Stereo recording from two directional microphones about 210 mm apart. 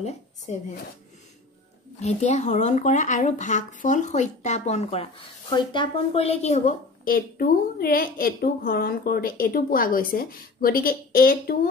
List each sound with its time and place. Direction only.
2.0 s a woman's voice: 30° left (ahead or behind)